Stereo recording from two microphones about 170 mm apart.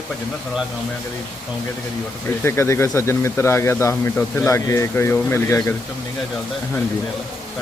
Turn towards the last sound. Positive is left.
turn(degrees=15)  # may be behind; listen again after turning